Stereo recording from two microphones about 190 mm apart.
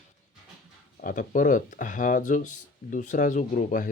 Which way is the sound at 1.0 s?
45° left (ahead or behind).